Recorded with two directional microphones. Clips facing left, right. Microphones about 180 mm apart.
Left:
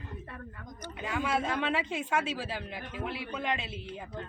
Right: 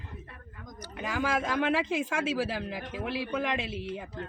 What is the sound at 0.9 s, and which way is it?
Speech, 90° right.